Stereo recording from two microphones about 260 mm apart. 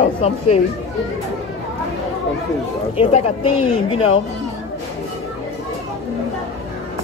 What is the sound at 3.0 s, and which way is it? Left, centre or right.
Speech, left.